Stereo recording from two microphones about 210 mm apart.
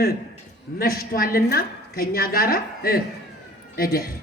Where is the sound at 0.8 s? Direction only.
45° left (ahead or behind).